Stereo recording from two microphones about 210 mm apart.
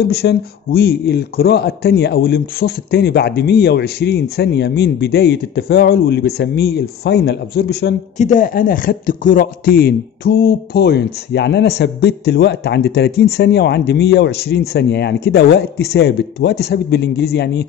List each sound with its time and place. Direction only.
0.0 s a man's voice: 50° left (ahead or behind)
8.2 s a man's voice: 35° left (ahead or behind)